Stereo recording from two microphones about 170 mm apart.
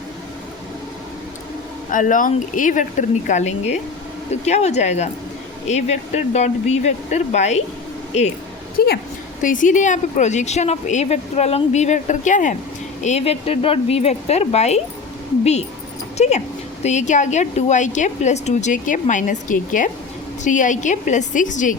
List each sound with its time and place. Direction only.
1.9 s a woman's voice: 50° left (ahead or behind)
8.8 s a woman's voice: 60° left (ahead or behind)
9.4 s a woman's voice: 50° left (ahead or behind)
16.1 s a woman's voice: 40° left (ahead or behind)